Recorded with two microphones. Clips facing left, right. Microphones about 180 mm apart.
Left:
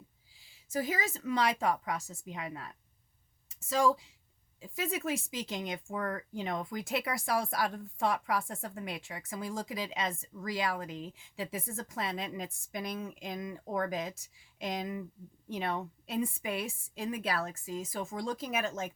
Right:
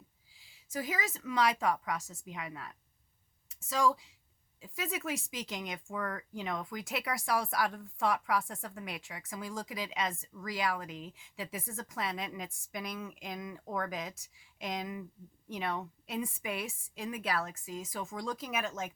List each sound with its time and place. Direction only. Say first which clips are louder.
0.7 s speech: left 3 dB; 30° left (ahead or behind)